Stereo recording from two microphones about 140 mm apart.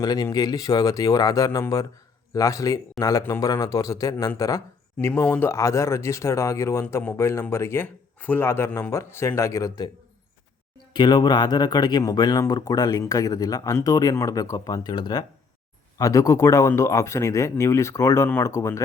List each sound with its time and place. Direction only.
0.0 s speech: 25° left (ahead or behind)
10.9 s speech: 30° left (ahead or behind)